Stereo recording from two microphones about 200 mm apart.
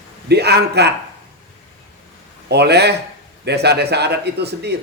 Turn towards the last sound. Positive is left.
turn(degrees=-55)  # may be behind; listen again after turning